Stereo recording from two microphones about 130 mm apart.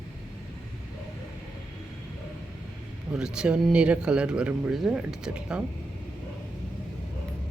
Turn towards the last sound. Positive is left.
turn(degrees=-5)  # may be behind; listen again after turning